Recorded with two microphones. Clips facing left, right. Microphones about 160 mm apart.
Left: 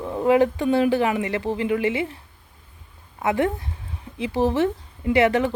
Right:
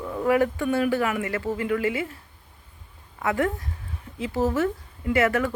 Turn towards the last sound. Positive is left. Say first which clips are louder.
# left 4 dB
turn(degrees=20)  # may be behind; listen again after turning